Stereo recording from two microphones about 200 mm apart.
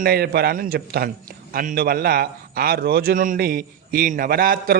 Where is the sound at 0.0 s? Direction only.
50° right (ahead or behind).